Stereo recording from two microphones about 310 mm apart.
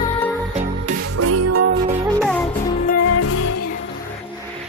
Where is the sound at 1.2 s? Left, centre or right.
Right.